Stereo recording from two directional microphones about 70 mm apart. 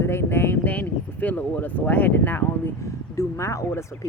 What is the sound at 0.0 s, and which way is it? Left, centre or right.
Speech, left.